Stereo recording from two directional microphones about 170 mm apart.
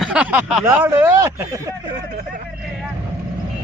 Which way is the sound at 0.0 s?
5° right (ahead or behind).